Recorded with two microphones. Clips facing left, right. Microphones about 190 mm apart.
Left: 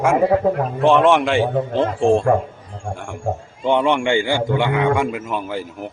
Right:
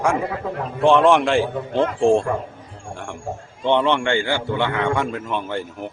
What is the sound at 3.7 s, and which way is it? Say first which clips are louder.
A man's voice: left 1 dB; 10° left (ahead or behind).